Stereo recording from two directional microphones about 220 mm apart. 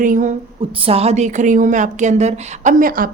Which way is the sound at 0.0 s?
35° right (ahead or behind).